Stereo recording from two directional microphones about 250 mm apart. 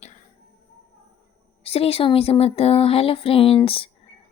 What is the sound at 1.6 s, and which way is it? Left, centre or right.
Speech, left.